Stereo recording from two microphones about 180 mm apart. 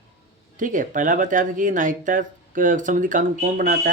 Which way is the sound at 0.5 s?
45° right (ahead or behind).